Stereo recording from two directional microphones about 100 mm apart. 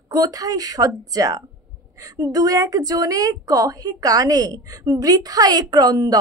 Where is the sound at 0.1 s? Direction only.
40° right (ahead or behind).